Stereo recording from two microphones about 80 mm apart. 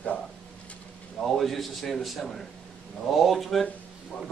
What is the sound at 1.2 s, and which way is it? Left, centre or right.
Speech, centre.